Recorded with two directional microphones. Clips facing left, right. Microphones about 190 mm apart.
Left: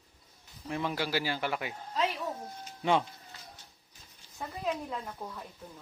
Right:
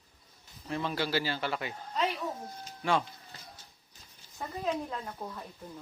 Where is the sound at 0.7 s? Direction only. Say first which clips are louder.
Even; 10° left (ahead or behind).